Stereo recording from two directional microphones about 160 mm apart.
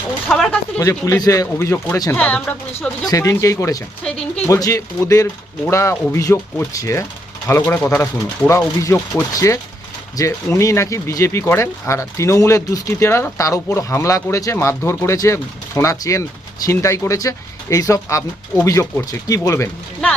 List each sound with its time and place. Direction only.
0.3 s a sound: 5° left (ahead or behind)
0.8 s speech: 20° left (ahead or behind)
3.1 s speech: 20° left (ahead or behind)